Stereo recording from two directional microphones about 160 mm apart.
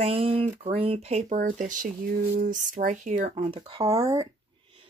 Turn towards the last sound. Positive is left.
turn(degrees=-20)  # may be behind; listen again after turning